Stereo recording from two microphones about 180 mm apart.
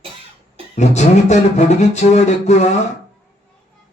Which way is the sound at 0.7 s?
40° left (ahead or behind).